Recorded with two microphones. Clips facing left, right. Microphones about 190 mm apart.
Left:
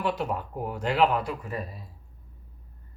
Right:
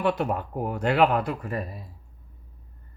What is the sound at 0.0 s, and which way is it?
Speech, 60° right (ahead or behind).